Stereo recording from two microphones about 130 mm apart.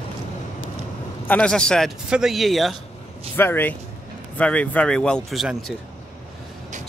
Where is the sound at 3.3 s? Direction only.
15° left (ahead or behind); by 5.5 s centre (ahead or behind).